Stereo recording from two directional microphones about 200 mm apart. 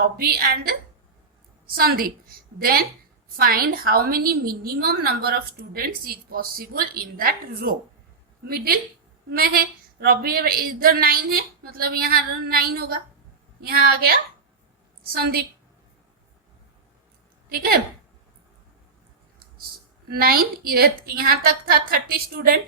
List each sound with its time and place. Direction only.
0.0 s a woman's voice: 50° right (ahead or behind)
20.1 s a woman's voice: 50° right (ahead or behind)